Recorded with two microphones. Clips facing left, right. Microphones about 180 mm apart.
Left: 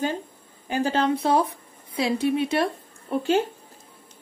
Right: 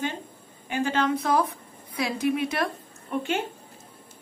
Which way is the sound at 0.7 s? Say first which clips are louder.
Left 2 dB; 35° left (ahead or behind).